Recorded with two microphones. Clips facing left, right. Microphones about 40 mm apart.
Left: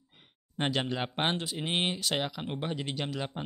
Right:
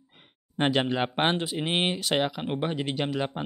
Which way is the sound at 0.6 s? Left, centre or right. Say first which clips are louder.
Right 6 dB; centre.